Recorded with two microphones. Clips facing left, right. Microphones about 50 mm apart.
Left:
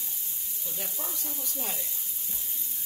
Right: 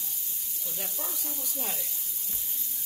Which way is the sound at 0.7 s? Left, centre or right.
Centre.